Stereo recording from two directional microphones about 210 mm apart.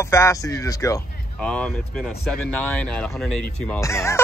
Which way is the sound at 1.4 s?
5° left (ahead or behind).